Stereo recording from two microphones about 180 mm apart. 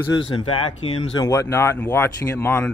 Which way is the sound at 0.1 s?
25° left (ahead or behind).